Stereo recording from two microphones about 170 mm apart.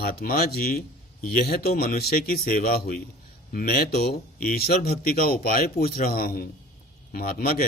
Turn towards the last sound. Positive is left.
turn(degrees=60)  # may be behind; listen again after turning